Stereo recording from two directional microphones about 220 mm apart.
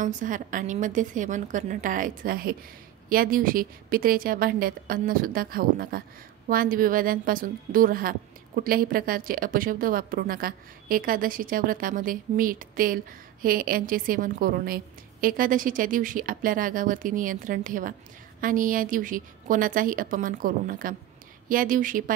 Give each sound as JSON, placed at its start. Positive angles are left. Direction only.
{"t": 0.0, "sound": "speech", "side_deg": -35}